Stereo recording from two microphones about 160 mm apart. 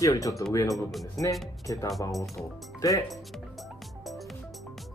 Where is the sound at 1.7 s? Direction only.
20° left (ahead or behind).